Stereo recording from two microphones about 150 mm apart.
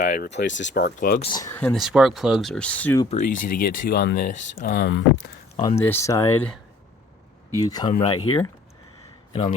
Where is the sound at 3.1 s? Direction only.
60° left (ahead or behind); by 4.3 s 90° left.